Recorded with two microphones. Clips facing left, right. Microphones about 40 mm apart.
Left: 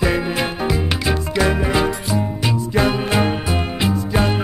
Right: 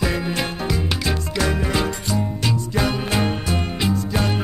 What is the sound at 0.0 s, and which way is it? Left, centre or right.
Music, centre.